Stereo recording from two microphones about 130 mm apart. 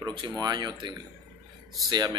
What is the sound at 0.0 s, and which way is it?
Speech, 35° right (ahead or behind).